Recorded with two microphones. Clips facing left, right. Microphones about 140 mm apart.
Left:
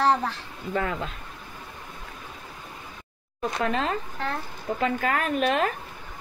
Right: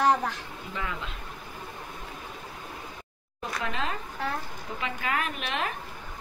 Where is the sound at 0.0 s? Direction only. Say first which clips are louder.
Left 1 dB; 15° right (ahead or behind).